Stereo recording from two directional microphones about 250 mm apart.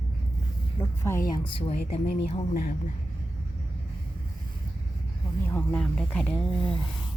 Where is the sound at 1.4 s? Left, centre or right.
Left.